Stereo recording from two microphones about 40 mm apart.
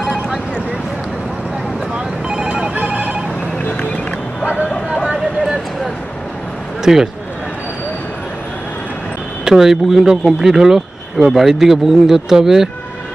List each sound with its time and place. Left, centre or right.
0.0 s a sound: centre
2.3 s telephone bell ringing: right
6.8 s speech: centre
9.4 s speech: centre